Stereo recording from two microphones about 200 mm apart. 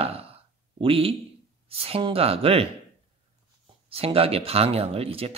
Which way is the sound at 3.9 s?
30° right (ahead or behind).